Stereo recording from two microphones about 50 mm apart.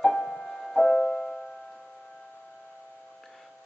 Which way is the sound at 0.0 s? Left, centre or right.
Centre.